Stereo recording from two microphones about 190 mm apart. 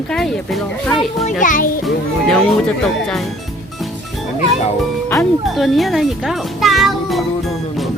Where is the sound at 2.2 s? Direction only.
5° left (ahead or behind).